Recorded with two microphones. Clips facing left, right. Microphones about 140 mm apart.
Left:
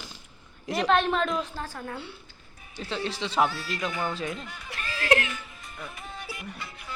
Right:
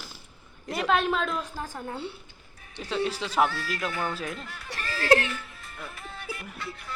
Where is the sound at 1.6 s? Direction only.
20° right (ahead or behind).